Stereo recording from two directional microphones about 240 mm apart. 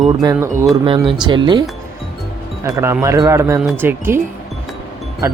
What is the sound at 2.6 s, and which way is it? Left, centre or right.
Speech, centre.